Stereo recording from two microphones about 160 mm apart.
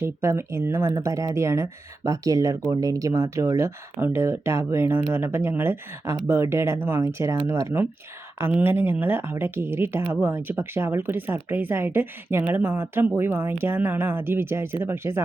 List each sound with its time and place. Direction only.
0.0 s speech: 15° right (ahead or behind)